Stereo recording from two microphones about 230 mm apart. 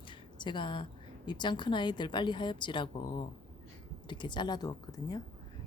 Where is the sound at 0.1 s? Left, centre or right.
Left.